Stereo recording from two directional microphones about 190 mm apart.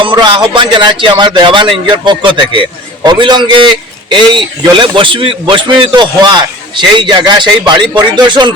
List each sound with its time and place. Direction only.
0.0 s a man's voice: 25° right (ahead or behind)